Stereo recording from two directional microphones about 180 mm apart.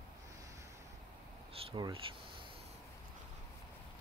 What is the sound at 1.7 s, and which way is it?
Speech, 25° right (ahead or behind).